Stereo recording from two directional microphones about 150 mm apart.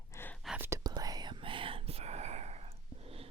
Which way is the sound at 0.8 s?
25° right (ahead or behind).